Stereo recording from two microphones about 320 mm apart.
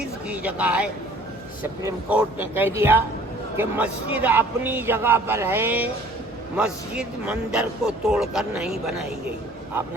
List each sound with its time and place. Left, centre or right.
0.3 s a man's voice: centre